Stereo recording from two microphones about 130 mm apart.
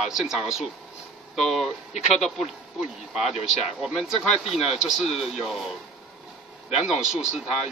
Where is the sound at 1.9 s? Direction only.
60° left (ahead or behind).